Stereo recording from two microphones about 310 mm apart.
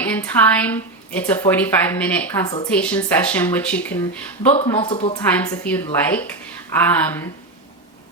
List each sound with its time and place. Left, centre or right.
0.0 s a woman's voice: centre
4.7 s speech: centre
5.3 s a woman's voice: centre